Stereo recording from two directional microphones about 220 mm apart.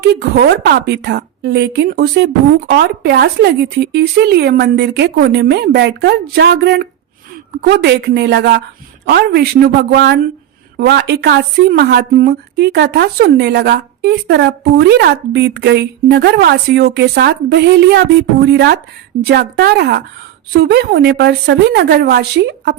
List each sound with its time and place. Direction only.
0.2 s a woman's voice: 50° right (ahead or behind)